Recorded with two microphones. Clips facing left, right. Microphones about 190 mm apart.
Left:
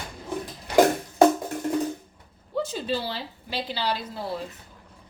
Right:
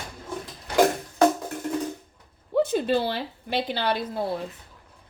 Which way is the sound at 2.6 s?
55° right (ahead or behind).